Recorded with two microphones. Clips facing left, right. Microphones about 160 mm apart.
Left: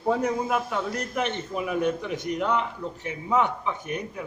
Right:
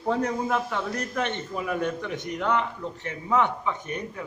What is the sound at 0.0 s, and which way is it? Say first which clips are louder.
A man's voice: left 1 dB; 10° left (ahead or behind).